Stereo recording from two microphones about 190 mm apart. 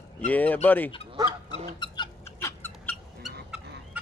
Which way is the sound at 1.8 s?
25° left (ahead or behind).